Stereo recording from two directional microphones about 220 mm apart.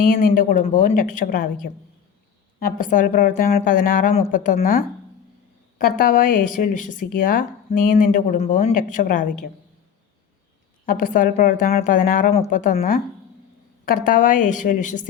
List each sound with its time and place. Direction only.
0.0 s speech: 40° left (ahead or behind)
10.8 s speech: 40° left (ahead or behind)